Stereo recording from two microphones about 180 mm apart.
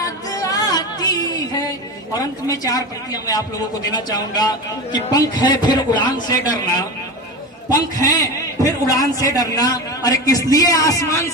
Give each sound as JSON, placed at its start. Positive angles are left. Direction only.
{"t": 0.0, "sound": "music", "side_deg": 20}
{"t": 2.1, "sound": "a man's voice", "side_deg": 20}
{"t": 7.7, "sound": "a man's voice", "side_deg": 20}